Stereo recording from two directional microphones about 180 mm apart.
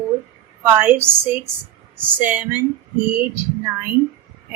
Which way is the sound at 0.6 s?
10° right (ahead or behind).